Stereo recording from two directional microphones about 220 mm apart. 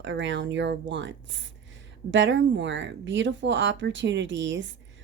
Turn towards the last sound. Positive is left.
turn(degrees=-55)  # may be behind; listen again after turning